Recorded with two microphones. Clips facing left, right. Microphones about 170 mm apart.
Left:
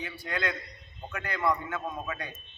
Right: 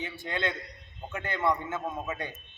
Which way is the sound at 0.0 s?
25° right (ahead or behind).